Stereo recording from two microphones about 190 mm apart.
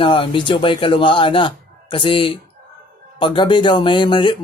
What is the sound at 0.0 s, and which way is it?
Speech, 25° left (ahead or behind).